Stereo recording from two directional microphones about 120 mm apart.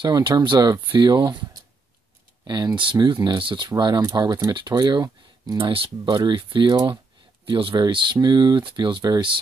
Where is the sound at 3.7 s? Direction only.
30° right (ahead or behind).